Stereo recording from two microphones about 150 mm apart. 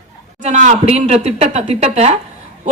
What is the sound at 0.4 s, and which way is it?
Speech, 50° right (ahead or behind).